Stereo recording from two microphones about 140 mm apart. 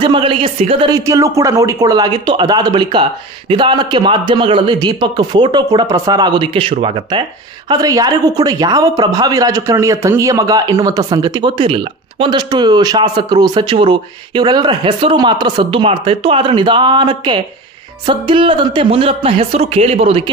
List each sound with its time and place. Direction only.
0.0 s speech: 35° right (ahead or behind)
0.9 s speech: 25° right (ahead or behind)
7.7 s speech: 25° right (ahead or behind); by 20.2 s 45° right (ahead or behind)